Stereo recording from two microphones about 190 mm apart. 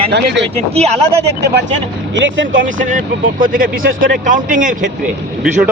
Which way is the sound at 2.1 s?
75° right (ahead or behind).